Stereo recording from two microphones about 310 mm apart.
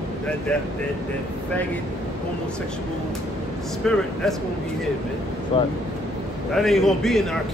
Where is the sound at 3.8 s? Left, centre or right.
Centre.